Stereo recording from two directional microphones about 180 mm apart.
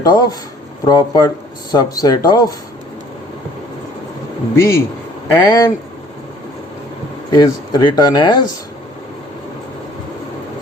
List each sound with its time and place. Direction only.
0.0 s speech: 20° left (ahead or behind)
4.5 s a man's voice: 15° left (ahead or behind)
7.3 s speech: 20° left (ahead or behind)